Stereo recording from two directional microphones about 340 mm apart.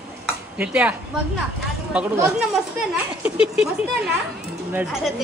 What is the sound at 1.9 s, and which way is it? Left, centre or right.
Speech, centre.